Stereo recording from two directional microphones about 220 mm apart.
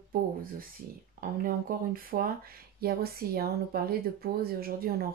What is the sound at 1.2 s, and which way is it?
Speech, 40° right (ahead or behind).